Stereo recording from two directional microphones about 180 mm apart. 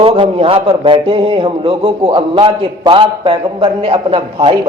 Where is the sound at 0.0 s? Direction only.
30° right (ahead or behind).